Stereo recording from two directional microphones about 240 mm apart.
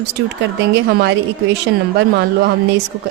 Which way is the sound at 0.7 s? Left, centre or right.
Right.